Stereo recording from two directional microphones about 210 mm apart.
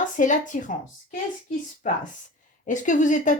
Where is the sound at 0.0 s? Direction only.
35° left (ahead or behind).